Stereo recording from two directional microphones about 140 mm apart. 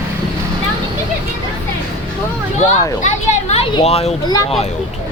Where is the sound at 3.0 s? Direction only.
55° left (ahead or behind).